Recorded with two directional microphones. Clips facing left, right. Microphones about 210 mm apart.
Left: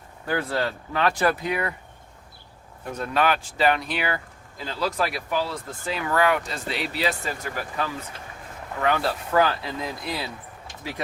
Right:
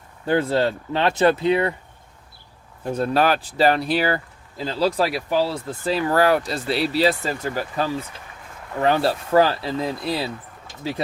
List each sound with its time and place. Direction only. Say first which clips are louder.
0.3 s speech: right 6 dB; 25° right (ahead or behind)
2.8 s speech: right 4 dB; 30° right (ahead or behind)